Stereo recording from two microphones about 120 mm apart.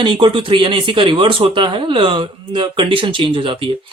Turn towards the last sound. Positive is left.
turn(degrees=-45)  # may be behind; listen again after turning